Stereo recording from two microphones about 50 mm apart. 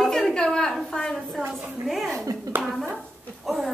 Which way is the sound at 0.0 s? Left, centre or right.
Centre.